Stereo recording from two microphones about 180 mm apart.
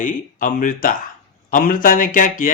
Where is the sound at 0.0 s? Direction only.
50° left (ahead or behind).